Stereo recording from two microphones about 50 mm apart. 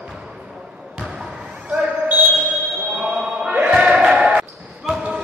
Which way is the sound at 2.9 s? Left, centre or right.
Centre.